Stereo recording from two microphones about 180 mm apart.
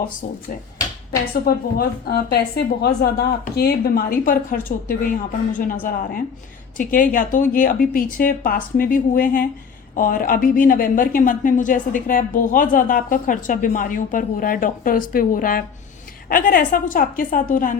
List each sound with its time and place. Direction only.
0.0 s a woman's voice: 50° left (ahead or behind)
6.7 s a woman's voice: 50° left (ahead or behind)